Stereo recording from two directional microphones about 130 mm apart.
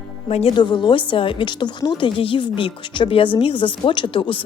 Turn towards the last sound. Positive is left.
turn(degrees=40)  # may be behind; listen again after turning